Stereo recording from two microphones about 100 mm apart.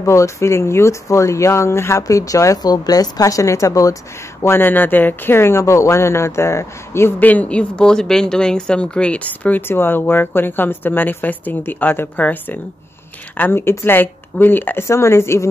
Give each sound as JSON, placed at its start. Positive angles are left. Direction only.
{"t": 0.0, "sound": "speech", "side_deg": 30}